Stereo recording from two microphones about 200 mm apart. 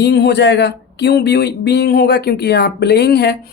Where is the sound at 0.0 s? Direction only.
55° left (ahead or behind).